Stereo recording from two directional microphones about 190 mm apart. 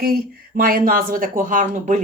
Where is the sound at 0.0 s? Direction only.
50° right (ahead or behind).